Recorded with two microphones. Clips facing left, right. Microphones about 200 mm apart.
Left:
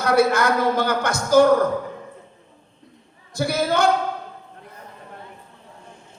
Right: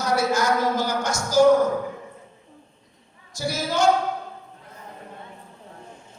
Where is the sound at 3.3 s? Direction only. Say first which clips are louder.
Left 5 dB; 60° left (ahead or behind).